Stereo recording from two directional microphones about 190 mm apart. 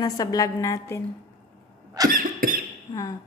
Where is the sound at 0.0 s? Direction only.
20° left (ahead or behind).